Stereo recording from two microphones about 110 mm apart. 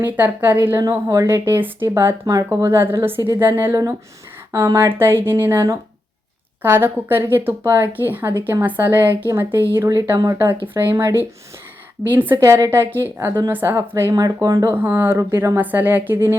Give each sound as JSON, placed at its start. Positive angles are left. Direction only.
{"t": 0.0, "sound": "a woman's voice", "side_deg": -15}
{"t": 0.8, "sound": "a woman's voice", "side_deg": -30}
{"t": 14.8, "sound": "speech", "side_deg": -20}